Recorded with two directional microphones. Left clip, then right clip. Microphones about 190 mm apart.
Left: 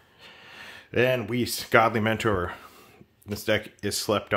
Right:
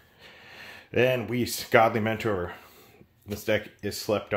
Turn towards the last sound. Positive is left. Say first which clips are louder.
# left 2 dB
turn(degrees=25)  # may be behind; listen again after turning